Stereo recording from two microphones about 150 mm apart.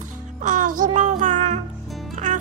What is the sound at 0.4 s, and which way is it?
Music, 60° right (ahead or behind).